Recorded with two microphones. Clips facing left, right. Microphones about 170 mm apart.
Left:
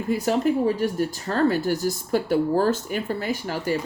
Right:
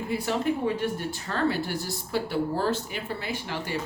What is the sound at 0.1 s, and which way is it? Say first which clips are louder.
Speech: left 6 dB; 40° left (ahead or behind).